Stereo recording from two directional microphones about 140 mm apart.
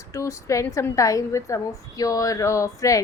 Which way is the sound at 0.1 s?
20° left (ahead or behind).